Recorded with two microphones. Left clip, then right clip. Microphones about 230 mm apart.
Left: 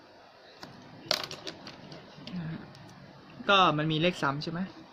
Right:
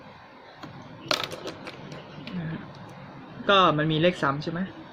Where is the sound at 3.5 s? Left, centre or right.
Left.